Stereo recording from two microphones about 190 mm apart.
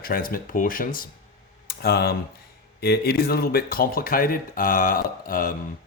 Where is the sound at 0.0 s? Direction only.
50° left (ahead or behind).